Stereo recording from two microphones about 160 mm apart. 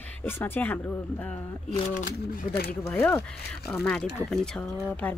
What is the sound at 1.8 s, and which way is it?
Speech, 55° left (ahead or behind).